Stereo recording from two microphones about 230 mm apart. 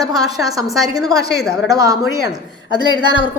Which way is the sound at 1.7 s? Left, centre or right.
Centre.